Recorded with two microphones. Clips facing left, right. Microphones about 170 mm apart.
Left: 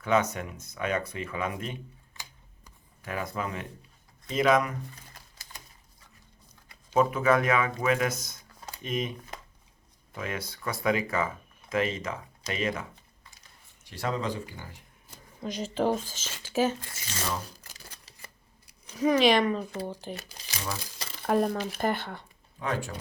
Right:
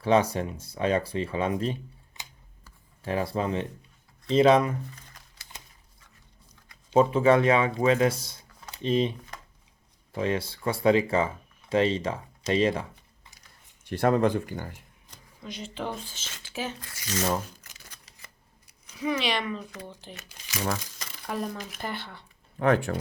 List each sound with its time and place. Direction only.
0.0 s speech: 30° right (ahead or behind)
2.2 s a sound: 20° right (ahead or behind)
3.0 s speech: 30° right (ahead or behind)
5.5 s typewriter: 20° right (ahead or behind)
6.9 s speech: 30° right (ahead or behind)
13.8 s speech: 55° right (ahead or behind)
15.4 s speech: 40° left (ahead or behind)
16.8 s speech: 30° left (ahead or behind)
17.4 s shuffling cards: 35° left (ahead or behind)
18.9 s speech: 40° left (ahead or behind)
20.7 s crumpling: 30° left (ahead or behind)
21.2 s speech: 50° left (ahead or behind)
22.5 s speech: 60° right (ahead or behind)